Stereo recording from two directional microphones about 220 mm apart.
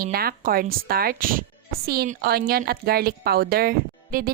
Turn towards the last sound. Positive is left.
turn(degrees=-45)  # may be behind; listen again after turning